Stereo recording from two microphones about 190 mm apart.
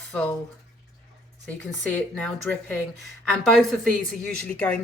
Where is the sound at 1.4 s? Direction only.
5° left (ahead or behind).